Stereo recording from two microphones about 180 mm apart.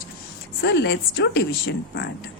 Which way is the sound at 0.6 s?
70° left (ahead or behind).